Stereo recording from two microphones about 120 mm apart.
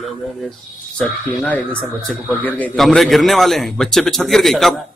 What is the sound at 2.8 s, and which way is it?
A man's voice, centre (ahead or behind).